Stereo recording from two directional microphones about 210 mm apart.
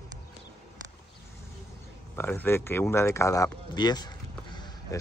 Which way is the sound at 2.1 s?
10° left (ahead or behind).